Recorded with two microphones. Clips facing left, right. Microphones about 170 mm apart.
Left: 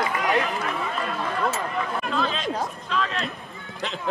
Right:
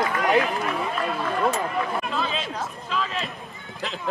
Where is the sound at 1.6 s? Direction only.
5° right (ahead or behind).